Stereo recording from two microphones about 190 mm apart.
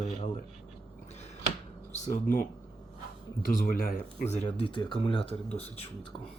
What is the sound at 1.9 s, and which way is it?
Speech, 45° left (ahead or behind).